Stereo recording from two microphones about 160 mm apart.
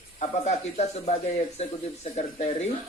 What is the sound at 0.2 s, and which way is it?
Speech, 45° left (ahead or behind).